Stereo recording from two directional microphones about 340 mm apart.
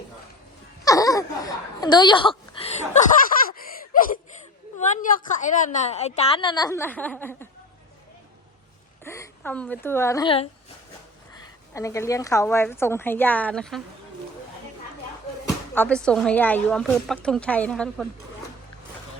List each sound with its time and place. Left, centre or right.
0.9 s a sound: centre
4.8 s a woman's voice: left; by 7.4 s centre
9.0 s a woman's voice: centre
11.7 s a woman's voice: centre
15.4 s speech: centre